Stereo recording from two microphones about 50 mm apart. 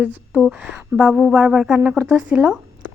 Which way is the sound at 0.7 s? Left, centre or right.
Centre.